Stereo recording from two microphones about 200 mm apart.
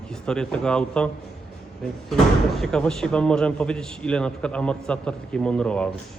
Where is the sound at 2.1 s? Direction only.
Centre (ahead or behind).